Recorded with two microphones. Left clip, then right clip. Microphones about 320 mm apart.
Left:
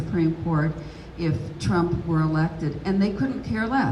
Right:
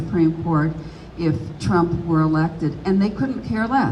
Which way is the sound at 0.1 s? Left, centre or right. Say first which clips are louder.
Right 6 dB; centre.